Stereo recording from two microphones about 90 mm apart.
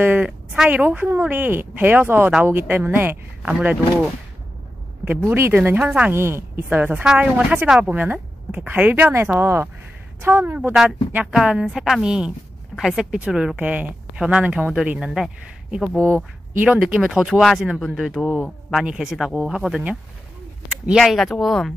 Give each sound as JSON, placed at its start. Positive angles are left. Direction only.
{"t": 0.0, "sound": "speech", "side_deg": -20}
{"t": 5.2, "sound": "speech", "side_deg": -25}
{"t": 6.1, "sound": "speech", "side_deg": -30}
{"t": 10.7, "sound": "speech", "side_deg": -5}
{"t": 16.5, "sound": "speech", "side_deg": -15}
{"t": 20.6, "sound": "a sound", "side_deg": -10}
{"t": 21.0, "sound": "speech", "side_deg": 5}